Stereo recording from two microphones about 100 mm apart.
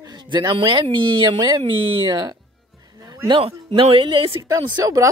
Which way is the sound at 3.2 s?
60° right (ahead or behind).